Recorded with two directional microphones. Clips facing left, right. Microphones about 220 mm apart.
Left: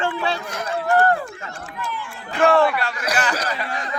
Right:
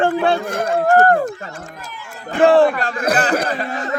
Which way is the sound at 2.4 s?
30° right (ahead or behind).